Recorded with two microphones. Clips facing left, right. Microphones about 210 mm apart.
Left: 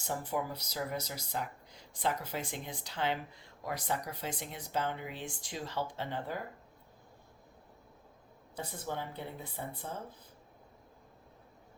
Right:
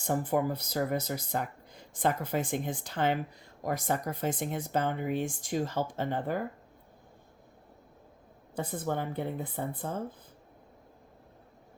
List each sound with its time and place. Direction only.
0.0 s speech: 50° right (ahead or behind)
8.5 s speech: 50° right (ahead or behind)